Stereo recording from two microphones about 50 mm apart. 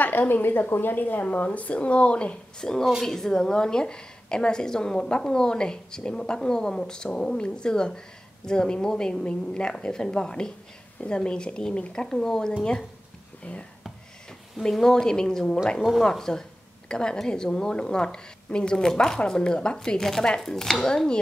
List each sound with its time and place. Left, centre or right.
0.0 s a woman's voice: left; by 2.8 s centre
3.0 s a woman's voice: centre
13.4 s speech: left
14.6 s a woman's voice: centre
20.0 s a woman's voice: centre